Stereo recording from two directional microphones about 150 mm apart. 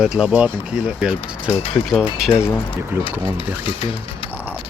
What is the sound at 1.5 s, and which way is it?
Speech, 40° left (ahead or behind).